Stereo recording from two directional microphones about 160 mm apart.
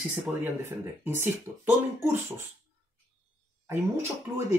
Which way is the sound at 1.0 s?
15° right (ahead or behind).